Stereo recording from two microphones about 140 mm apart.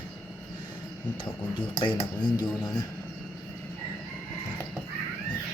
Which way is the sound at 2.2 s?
30° left (ahead or behind).